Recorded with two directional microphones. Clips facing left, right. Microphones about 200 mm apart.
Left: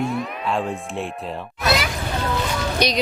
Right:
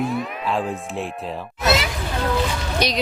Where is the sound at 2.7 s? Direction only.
5° right (ahead or behind).